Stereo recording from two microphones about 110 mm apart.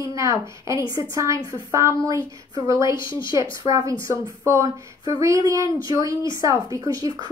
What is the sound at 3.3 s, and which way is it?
A woman's voice, 30° right (ahead or behind).